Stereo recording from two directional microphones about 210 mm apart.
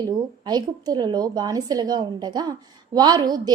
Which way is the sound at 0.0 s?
20° right (ahead or behind).